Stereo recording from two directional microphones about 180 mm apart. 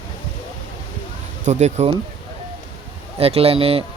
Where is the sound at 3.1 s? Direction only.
35° right (ahead or behind).